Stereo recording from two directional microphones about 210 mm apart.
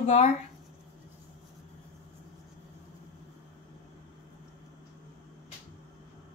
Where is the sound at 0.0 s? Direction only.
30° left (ahead or behind).